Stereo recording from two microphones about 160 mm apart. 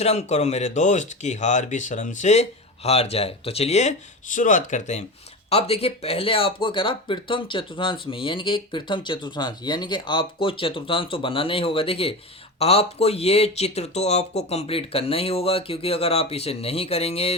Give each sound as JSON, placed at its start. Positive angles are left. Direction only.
{"t": 0.0, "sound": "speech", "side_deg": 45}